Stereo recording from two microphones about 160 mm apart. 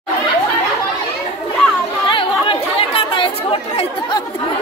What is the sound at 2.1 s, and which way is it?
Chatter, 35° left (ahead or behind).